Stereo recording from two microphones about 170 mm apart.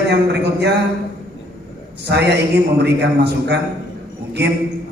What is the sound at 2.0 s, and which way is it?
A man's voice, 80° right.